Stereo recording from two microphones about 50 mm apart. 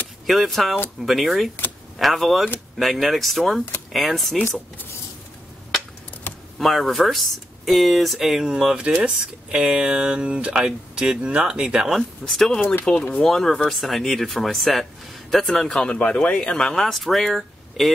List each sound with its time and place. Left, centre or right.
0.3 s speech: centre
6.6 s speech: centre
12.3 s speech: centre
12.9 s speech: centre
13.3 s speech: centre
15.8 s speech: left
16.5 s speech: centre